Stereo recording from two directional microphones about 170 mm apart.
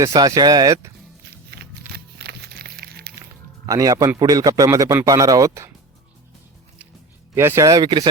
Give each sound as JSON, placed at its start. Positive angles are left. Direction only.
{"t": 0.0, "sound": "speech", "side_deg": -20}
{"t": 1.9, "sound": "a sound", "side_deg": -75}
{"t": 3.7, "sound": "speech", "side_deg": -20}
{"t": 7.3, "sound": "speech", "side_deg": -15}